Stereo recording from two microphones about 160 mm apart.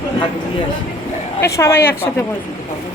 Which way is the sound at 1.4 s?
20° left (ahead or behind).